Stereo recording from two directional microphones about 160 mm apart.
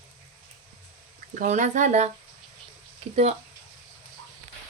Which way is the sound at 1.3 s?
50° right (ahead or behind).